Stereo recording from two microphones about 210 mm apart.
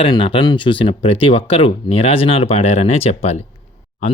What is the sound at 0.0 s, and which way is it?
Speech, 25° left (ahead or behind).